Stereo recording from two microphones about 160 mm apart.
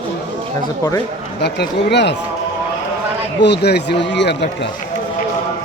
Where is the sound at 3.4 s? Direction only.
90° left.